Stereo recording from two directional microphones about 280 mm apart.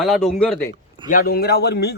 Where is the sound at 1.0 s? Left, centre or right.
Left.